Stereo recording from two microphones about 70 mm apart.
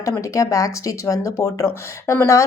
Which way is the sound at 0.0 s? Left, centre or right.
Left.